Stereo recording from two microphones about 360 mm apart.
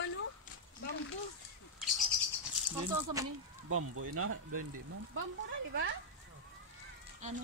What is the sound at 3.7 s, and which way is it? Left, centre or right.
Speech, right.